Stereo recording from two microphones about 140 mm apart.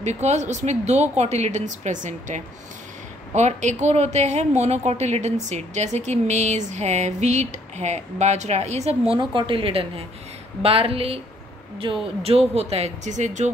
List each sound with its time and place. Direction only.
0.0 s a woman's voice: 55° right (ahead or behind)